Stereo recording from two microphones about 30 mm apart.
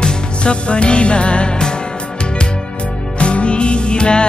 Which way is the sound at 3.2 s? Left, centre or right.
Left.